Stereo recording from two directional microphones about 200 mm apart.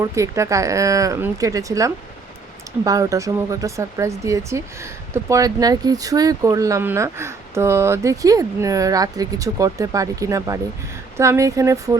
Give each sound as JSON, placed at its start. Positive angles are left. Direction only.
{"t": 0.0, "sound": "speech", "side_deg": -15}